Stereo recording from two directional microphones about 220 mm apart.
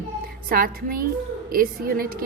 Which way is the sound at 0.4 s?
40° right (ahead or behind).